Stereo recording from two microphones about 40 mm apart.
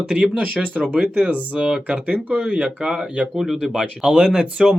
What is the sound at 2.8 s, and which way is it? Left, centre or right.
Speech, centre.